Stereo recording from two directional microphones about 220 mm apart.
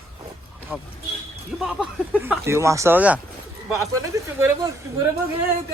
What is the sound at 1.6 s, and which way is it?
Speech, centre (ahead or behind).